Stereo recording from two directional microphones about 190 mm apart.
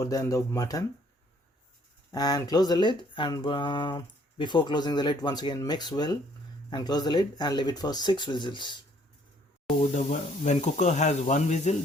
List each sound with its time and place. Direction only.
0.0 s speech: 20° left (ahead or behind)
2.1 s speech: 20° left (ahead or behind)
9.9 s speech: 40° left (ahead or behind)